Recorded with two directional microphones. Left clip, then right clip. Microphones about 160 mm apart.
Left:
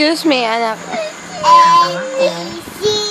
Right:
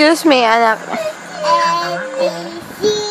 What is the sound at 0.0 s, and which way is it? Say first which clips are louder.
Speech: right 3 dB; 30° right (ahead or behind).